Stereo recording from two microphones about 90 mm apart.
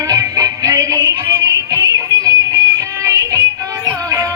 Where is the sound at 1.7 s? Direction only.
40° right (ahead or behind).